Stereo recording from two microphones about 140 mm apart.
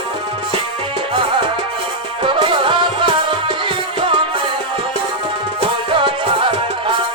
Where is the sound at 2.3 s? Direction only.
35° right (ahead or behind).